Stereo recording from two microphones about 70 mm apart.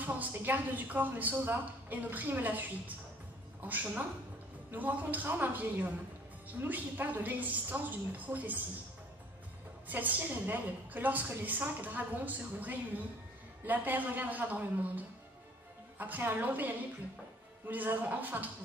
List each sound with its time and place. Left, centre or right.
0.0 s a woman's voice: right
3.6 s a woman's voice: right
9.8 s a woman's voice: right